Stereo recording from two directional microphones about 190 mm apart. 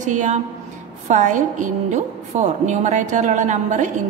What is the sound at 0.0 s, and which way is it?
A woman's voice, 40° right (ahead or behind).